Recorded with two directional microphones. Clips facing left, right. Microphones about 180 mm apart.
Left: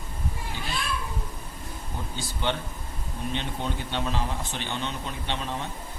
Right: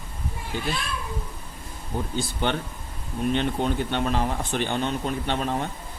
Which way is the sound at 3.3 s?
55° right (ahead or behind).